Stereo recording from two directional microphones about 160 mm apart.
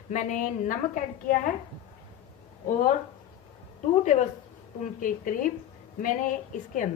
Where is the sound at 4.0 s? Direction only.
50° left (ahead or behind).